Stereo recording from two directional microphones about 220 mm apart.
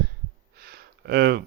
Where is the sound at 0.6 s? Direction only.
45° right (ahead or behind).